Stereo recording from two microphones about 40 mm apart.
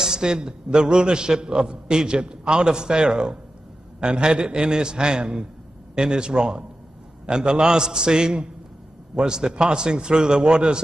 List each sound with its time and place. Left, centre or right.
0.0 s a man's voice: centre